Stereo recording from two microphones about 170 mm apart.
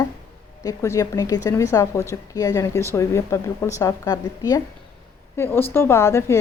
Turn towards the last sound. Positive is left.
turn(degrees=15)  # may be behind; listen again after turning